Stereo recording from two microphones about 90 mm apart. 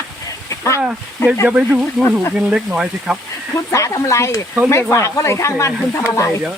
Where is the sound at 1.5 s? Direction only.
15° right (ahead or behind).